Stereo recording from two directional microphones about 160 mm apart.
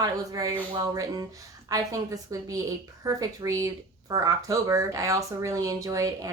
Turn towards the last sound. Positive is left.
turn(degrees=-20)  # may be behind; listen again after turning